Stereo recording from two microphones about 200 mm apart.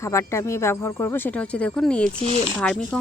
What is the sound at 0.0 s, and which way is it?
Speech, 15° left (ahead or behind).